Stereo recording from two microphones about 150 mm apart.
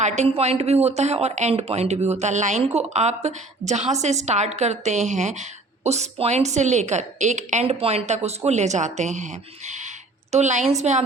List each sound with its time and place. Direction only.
0.0 s a woman's voice: 45° right (ahead or behind)